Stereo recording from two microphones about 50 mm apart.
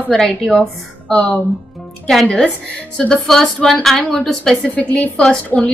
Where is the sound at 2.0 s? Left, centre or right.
Centre.